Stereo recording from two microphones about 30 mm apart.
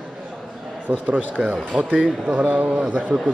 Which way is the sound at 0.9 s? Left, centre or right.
Right.